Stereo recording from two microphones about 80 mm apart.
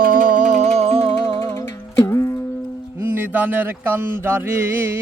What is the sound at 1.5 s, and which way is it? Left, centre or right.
Music, left.